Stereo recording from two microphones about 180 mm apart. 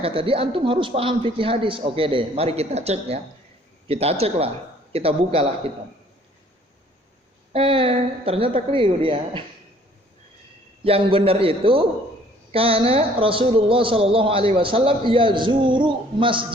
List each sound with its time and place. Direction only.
0.0 s speech: 30° right (ahead or behind)
7.5 s speech: 30° right (ahead or behind)
10.8 s speech: 30° right (ahead or behind)